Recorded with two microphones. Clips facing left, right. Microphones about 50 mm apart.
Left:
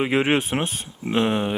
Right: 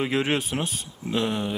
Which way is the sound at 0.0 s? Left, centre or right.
Left.